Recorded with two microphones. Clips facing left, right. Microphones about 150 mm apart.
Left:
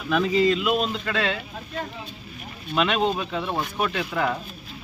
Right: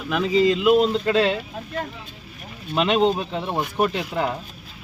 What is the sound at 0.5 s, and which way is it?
Speech, 20° right (ahead or behind).